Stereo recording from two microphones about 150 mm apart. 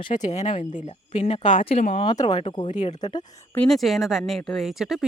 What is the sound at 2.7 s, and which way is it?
Speech, 55° left (ahead or behind).